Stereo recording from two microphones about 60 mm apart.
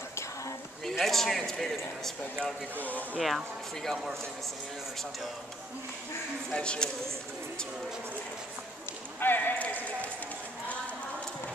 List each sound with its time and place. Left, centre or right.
0.8 s speech: centre
2.8 s speech: left
3.2 s speech: centre
6.5 s a man's voice: centre
9.2 s clip-clop: left